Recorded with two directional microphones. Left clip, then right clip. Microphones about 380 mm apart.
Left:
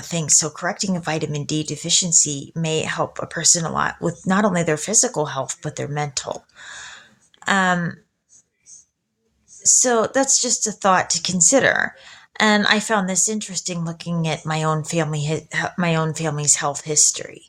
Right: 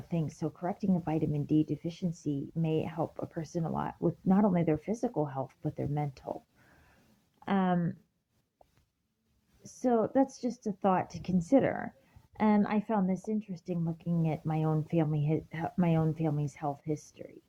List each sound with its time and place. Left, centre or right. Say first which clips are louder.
0.3 s speech: left 15 dB; right
7.4 s speech: left 13 dB; right
9.6 s speech: left 12 dB; right